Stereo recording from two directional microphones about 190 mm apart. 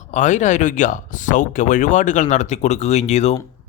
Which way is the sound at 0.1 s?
40° left (ahead or behind).